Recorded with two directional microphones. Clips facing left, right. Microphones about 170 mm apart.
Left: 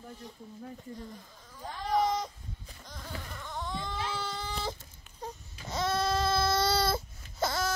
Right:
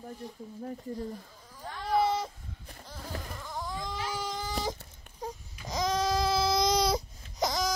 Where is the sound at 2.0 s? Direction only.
5° right (ahead or behind).